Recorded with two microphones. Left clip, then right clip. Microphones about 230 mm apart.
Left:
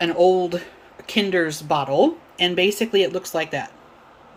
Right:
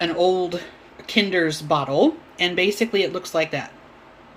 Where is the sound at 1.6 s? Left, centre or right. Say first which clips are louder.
Left 1 dB; centre.